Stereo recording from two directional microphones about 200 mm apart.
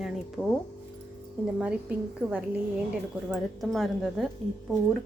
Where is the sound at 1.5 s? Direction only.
5° right (ahead or behind).